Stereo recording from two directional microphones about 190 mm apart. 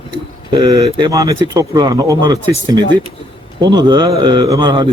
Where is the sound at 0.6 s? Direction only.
20° right (ahead or behind).